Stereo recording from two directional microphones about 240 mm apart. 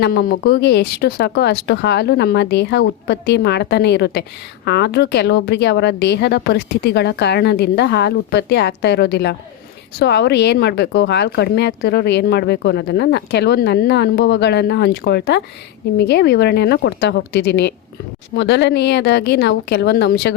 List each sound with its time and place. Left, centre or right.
0.0 s speech: left